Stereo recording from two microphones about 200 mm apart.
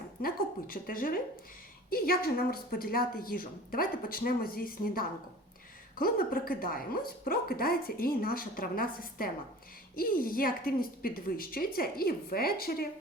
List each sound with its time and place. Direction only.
0.2 s a woman's voice: 45° left (ahead or behind)